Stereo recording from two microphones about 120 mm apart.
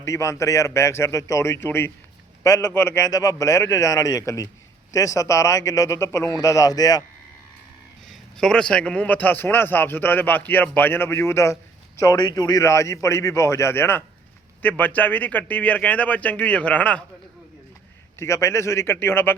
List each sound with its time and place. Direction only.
0.0 s a man's voice: 25° left (ahead or behind)
8.0 s a man's voice: centre (ahead or behind); by 11.5 s 20° left (ahead or behind)
12.1 s a man's voice: 35° left (ahead or behind); by 17.0 s 10° left (ahead or behind)
18.2 s a man's voice: 25° left (ahead or behind)